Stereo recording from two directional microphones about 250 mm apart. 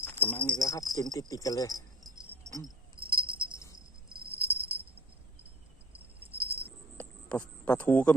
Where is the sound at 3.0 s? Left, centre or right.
Centre.